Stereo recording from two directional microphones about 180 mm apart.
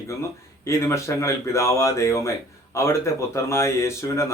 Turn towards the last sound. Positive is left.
turn(degrees=15)  # may be behind; listen again after turning